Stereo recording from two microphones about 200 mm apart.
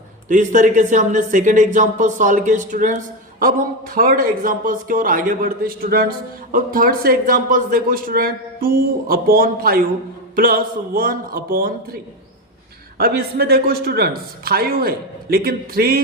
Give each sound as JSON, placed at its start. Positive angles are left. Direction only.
{"t": 0.3, "sound": "a man's voice", "side_deg": -40}
{"t": 13.0, "sound": "a man's voice", "side_deg": -50}